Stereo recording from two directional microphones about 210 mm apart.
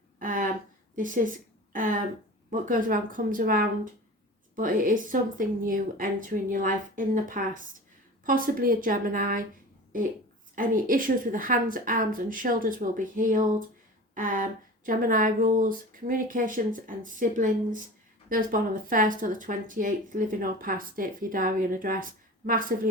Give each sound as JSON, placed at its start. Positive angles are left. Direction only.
{"t": 0.2, "sound": "a sound", "side_deg": -40}
{"t": 0.9, "sound": "speech", "side_deg": -40}
{"t": 10.5, "sound": "speech", "side_deg": -40}